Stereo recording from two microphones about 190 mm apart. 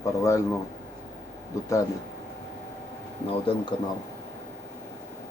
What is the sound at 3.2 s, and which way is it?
Speech, 30° left (ahead or behind).